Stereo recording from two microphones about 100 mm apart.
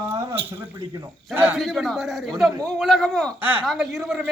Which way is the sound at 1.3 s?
20° right (ahead or behind).